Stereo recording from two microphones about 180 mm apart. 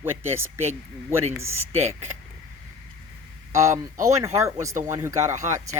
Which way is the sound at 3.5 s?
15° right (ahead or behind).